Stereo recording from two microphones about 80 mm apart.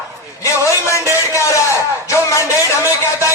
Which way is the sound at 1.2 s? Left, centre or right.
Left.